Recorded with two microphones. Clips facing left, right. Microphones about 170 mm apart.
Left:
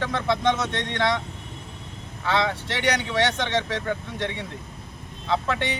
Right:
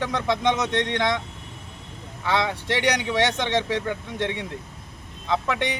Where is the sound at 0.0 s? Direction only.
15° right (ahead or behind).